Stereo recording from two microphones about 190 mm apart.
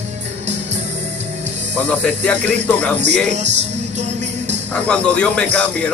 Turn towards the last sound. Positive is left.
turn(degrees=5)  # may be behind; listen again after turning